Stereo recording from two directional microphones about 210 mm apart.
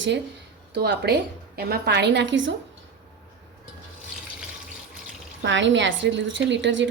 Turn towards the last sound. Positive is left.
turn(degrees=-60)  # may be behind; listen again after turning